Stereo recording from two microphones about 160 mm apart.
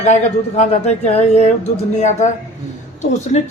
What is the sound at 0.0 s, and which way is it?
A man's voice, 40° left (ahead or behind).